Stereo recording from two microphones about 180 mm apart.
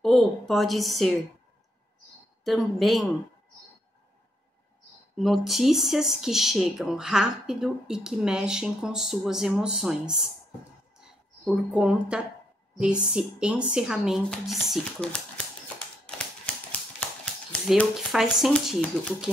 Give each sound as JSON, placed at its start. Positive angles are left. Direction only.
{"t": 0.0, "sound": "speech", "side_deg": 0}
{"t": 2.4, "sound": "speech", "side_deg": 0}
{"t": 5.1, "sound": "speech", "side_deg": 0}
{"t": 11.4, "sound": "speech", "side_deg": -5}
{"t": 17.2, "sound": "speech", "side_deg": 5}